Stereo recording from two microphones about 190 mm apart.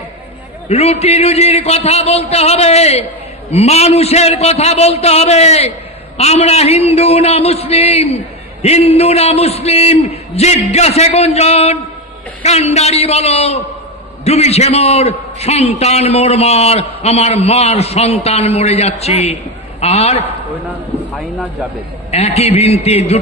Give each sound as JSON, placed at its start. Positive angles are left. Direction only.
{"t": 0.7, "sound": "a man's voice", "side_deg": 35}
{"t": 22.1, "sound": "a man's voice", "side_deg": 35}